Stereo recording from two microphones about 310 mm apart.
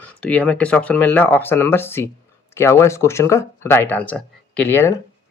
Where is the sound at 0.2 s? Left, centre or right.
Centre.